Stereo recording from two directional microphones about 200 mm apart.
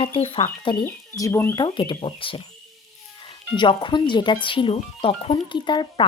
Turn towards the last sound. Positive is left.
turn(degrees=20)  # may be behind; listen again after turning